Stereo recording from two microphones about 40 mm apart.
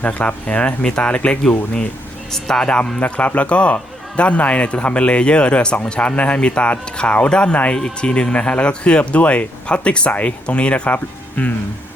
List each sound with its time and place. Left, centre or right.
0.0 s speech: left
2.3 s a man's voice: centre
2.6 s a man's voice: left
10.8 s speech: left